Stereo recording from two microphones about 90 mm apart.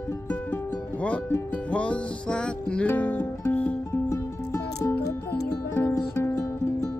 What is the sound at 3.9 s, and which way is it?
Music, 30° left (ahead or behind).